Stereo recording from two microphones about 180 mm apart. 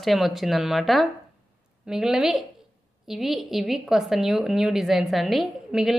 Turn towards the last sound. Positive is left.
turn(degrees=0)  # may be behind; listen again after turning